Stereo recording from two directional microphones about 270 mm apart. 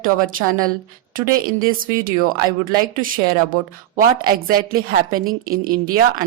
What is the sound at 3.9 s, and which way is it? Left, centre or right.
A woman's voice, right.